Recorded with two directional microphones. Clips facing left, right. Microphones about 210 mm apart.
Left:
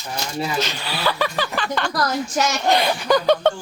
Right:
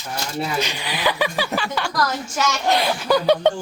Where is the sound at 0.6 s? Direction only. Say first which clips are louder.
Right 1 dB; 15° right (ahead or behind).